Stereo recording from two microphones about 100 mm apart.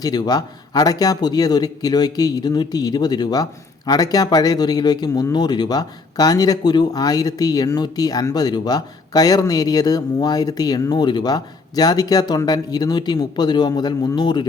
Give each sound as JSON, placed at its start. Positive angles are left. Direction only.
{"t": 0.0, "sound": "speech", "side_deg": 40}